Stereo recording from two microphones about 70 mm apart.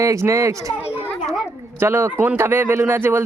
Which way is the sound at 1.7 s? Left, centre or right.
Right.